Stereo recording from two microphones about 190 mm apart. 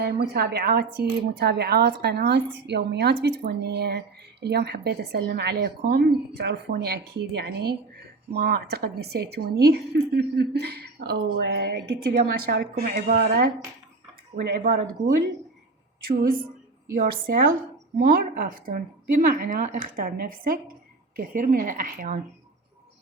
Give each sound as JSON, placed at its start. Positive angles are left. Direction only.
{"t": 0.0, "sound": "a woman's voice", "side_deg": -60}
{"t": 16.9, "sound": "a woman's voice", "side_deg": -45}